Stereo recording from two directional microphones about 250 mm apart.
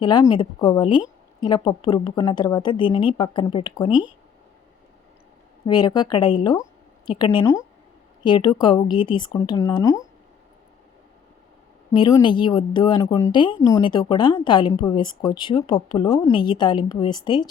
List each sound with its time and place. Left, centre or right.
0.0 s a woman's voice: centre
5.6 s a woman's voice: centre
11.9 s a woman's voice: centre